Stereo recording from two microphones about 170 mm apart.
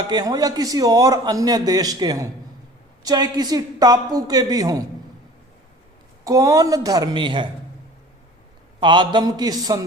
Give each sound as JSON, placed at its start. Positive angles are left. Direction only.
{"t": 0.1, "sound": "a man's voice", "side_deg": -20}
{"t": 6.2, "sound": "a man's voice", "side_deg": -20}
{"t": 8.8, "sound": "a man's voice", "side_deg": -25}